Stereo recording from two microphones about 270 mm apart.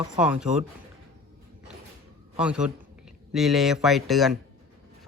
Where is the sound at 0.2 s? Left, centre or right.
Centre.